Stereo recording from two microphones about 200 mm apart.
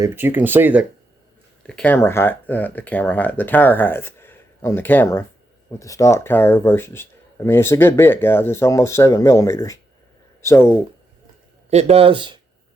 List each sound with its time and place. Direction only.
0.0 s speech: 10° right (ahead or behind)
1.6 s speech: 5° left (ahead or behind)
11.7 s speech: 30° right (ahead or behind)